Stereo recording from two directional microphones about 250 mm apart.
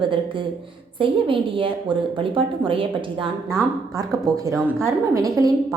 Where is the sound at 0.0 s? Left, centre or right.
Centre.